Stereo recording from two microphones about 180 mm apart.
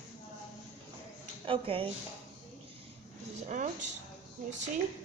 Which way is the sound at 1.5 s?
30° right (ahead or behind).